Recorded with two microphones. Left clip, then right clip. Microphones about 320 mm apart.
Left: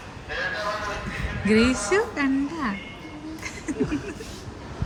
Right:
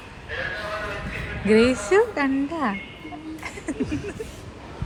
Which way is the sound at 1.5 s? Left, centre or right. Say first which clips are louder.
Right 3 dB; centre.